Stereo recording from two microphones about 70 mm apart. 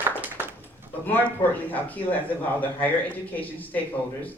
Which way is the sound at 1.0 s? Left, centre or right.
Left.